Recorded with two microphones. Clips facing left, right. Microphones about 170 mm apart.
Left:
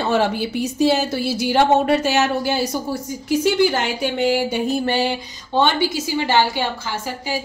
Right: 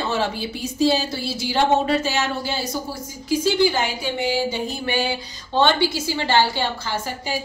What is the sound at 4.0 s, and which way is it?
Speech, 65° left (ahead or behind).